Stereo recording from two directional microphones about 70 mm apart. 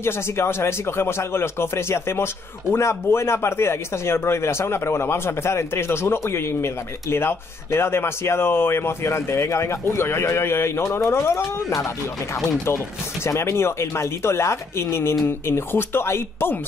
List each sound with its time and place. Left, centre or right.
0.0 s speech: left